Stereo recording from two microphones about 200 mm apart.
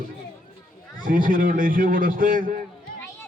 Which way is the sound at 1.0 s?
45° right (ahead or behind).